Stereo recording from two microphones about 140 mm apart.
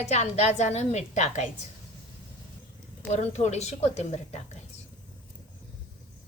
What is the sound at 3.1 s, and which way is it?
A woman's voice, 55° left (ahead or behind).